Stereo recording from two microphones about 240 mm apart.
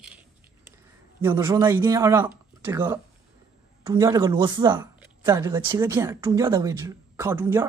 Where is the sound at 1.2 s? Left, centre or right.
Centre.